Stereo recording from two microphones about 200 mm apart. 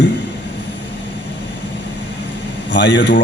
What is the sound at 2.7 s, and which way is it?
Speech, 65° left (ahead or behind).